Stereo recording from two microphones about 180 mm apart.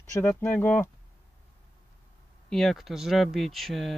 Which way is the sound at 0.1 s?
10° left (ahead or behind).